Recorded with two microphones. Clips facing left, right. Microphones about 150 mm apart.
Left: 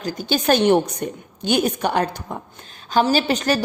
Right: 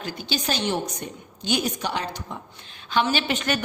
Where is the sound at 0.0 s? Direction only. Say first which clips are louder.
Left 7 dB; 45° left (ahead or behind).